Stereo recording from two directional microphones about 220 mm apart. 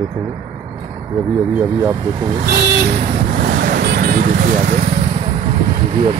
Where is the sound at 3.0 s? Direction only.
40° right (ahead or behind).